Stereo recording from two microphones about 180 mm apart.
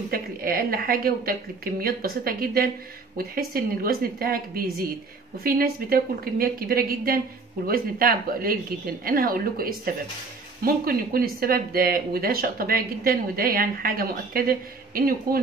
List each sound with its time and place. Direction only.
0.1 s a woman's voice: 55° right (ahead or behind)